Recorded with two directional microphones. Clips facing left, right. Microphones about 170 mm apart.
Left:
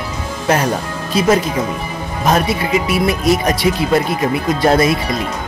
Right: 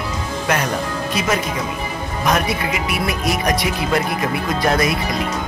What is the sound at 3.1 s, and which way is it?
Speech, 25° left (ahead or behind).